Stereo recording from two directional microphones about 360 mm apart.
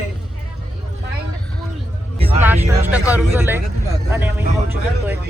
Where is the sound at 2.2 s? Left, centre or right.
Centre.